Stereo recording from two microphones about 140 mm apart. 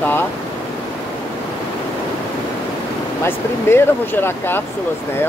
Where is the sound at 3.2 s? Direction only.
15° left (ahead or behind).